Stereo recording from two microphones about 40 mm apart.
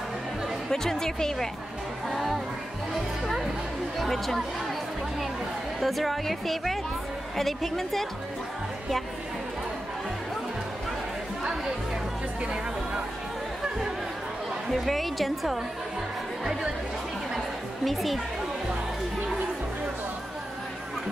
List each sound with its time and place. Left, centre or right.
0.7 s speech: centre
2.0 s music: centre
2.9 s a woman's voice: centre
5.8 s a woman's voice: centre
14.7 s a woman's voice: centre
17.8 s a woman's voice: centre